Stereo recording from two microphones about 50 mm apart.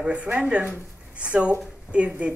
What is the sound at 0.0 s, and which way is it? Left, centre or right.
Speech, right.